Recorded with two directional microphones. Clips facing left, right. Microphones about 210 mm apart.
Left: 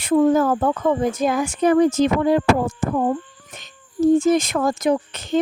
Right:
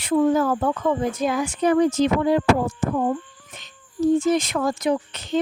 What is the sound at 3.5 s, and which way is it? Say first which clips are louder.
Speech: left 4 dB; 45° left (ahead or behind).